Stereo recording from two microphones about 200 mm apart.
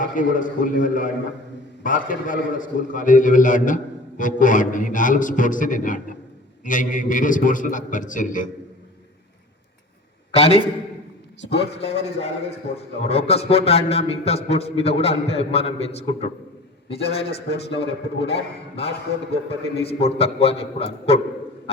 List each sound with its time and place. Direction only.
0.0 s a man's voice: 40° left (ahead or behind)
10.3 s a man's voice: 30° left (ahead or behind)